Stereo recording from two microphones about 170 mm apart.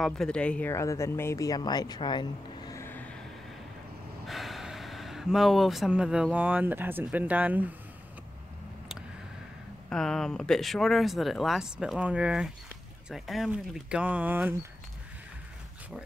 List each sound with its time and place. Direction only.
0.0 s speech: 5° left (ahead or behind)
4.3 s speech: centre (ahead or behind)
9.8 s speech: 5° left (ahead or behind)